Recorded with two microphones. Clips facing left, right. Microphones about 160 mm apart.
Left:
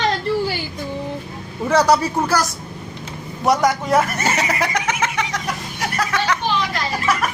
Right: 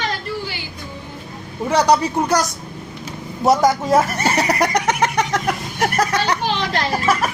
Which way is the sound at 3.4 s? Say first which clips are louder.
Right 2 dB; 25° right (ahead or behind).